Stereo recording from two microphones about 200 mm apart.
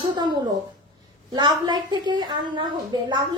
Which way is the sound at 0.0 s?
20° right (ahead or behind).